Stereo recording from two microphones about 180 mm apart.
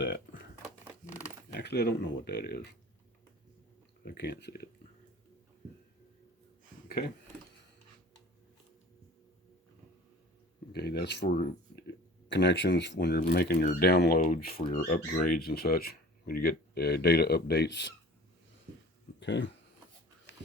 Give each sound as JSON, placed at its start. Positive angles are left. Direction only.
{"t": 1.5, "sound": "speech", "side_deg": 65}
{"t": 4.0, "sound": "speech", "side_deg": 60}
{"t": 6.8, "sound": "a sound", "side_deg": 60}
{"t": 10.7, "sound": "speech", "side_deg": 65}
{"t": 19.2, "sound": "speech", "side_deg": 75}